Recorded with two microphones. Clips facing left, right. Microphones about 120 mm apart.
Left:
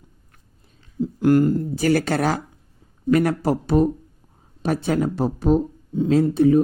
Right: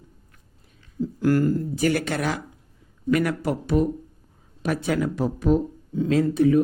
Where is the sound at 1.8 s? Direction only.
35° left (ahead or behind).